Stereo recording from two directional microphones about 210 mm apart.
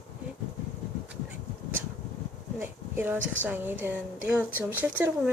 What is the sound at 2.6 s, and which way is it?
Speech, 10° right (ahead or behind).